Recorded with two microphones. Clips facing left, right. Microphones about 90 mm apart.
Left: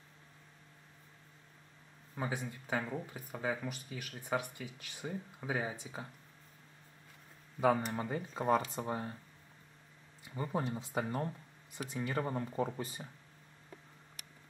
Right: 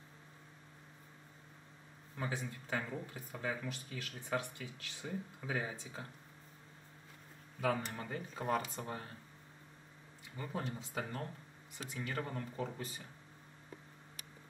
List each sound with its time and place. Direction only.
2.1 s speech: 20° left (ahead or behind)
7.6 s speech: 25° left (ahead or behind)
10.3 s speech: 25° left (ahead or behind)